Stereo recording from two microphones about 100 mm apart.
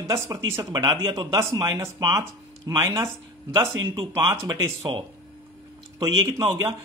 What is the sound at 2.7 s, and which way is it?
Speech, 45° right (ahead or behind).